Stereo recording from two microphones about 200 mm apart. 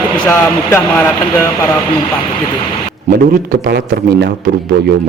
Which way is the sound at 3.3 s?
50° right (ahead or behind).